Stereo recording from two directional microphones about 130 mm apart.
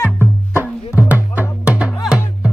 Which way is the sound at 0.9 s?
15° right (ahead or behind).